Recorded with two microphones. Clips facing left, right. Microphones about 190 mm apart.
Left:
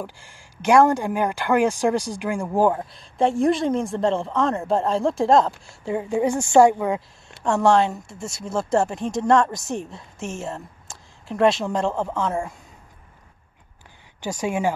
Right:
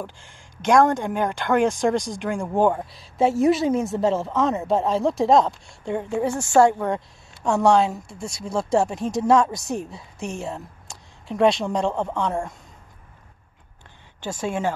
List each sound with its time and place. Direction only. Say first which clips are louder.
0.0 s a woman's voice: left 1 dB; 10° left (ahead or behind)
6.0 s a woman's voice: left 4 dB; 15° left (ahead or behind)
14.2 s speech: left 2 dB; 10° left (ahead or behind)